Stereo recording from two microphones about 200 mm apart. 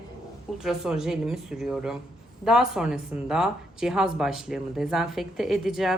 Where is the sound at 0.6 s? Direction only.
Centre (ahead or behind).